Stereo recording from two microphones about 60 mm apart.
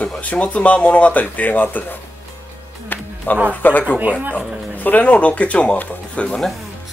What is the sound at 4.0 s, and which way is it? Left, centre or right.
Speech, right.